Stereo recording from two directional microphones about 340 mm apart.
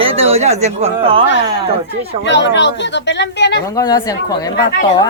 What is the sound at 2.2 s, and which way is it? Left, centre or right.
Speech, left.